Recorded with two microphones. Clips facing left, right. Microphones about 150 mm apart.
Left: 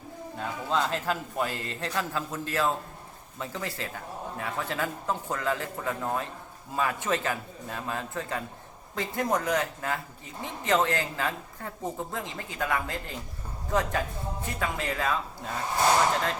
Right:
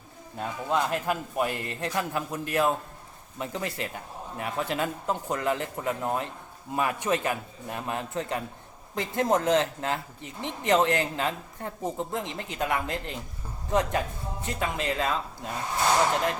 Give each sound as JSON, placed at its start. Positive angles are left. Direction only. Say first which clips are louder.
{"t": 0.3, "sound": "a man's voice", "louder": "right 1 dB", "side_deg": -15}